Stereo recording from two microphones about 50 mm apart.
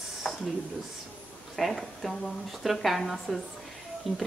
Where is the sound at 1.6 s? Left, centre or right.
Centre.